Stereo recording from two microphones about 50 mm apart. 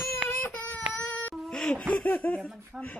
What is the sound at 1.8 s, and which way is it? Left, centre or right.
Laughter, left.